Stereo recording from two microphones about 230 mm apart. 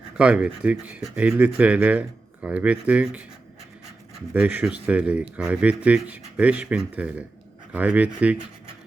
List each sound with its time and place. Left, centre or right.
0.2 s speech: centre
4.4 s speech: centre